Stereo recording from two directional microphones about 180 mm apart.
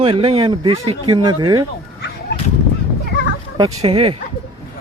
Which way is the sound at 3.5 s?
25° right (ahead or behind).